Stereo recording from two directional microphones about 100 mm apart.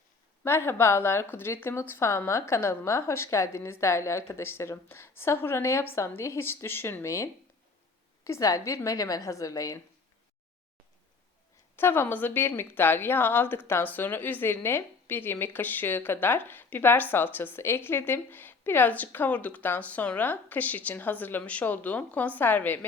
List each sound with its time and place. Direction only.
0.4 s a woman's voice: 25° left (ahead or behind)
11.8 s a woman's voice: 20° left (ahead or behind)